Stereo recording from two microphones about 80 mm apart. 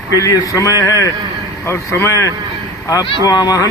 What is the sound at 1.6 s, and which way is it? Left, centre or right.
Speech, left.